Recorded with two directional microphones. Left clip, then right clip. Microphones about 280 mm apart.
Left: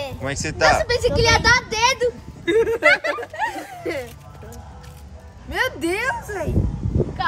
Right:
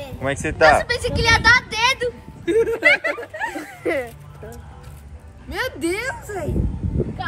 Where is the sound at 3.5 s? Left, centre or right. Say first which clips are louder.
Right 4 dB; centre.